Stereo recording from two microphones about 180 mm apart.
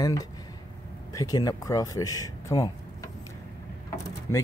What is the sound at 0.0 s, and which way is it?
Speech, 20° left (ahead or behind).